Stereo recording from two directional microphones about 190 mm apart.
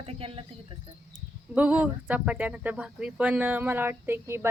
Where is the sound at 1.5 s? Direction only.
5° right (ahead or behind).